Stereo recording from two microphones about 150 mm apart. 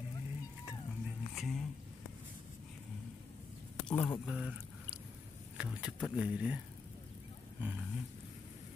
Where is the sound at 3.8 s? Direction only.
15° left (ahead or behind).